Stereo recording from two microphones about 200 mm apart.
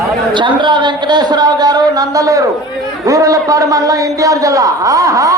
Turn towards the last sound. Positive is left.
turn(degrees=-15)  # may be behind; listen again after turning